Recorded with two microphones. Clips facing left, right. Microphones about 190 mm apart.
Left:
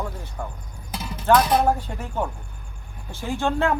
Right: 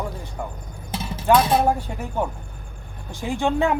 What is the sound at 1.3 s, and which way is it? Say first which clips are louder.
Speech: right 1 dB; 25° right (ahead or behind).